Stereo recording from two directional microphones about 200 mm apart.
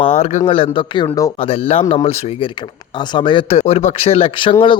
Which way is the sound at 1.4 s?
30° left (ahead or behind).